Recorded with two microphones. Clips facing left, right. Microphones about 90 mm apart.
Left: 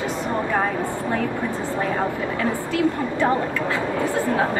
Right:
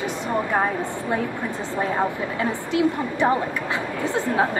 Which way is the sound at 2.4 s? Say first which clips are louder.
Right 1 dB; 20° right (ahead or behind).